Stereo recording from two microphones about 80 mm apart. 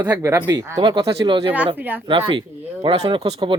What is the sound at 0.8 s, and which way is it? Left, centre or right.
Speech, right.